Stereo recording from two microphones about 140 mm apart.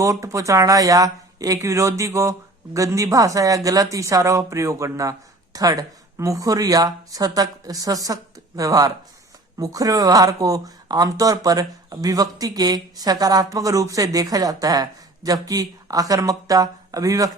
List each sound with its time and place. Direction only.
0.0 s speech: 25° right (ahead or behind)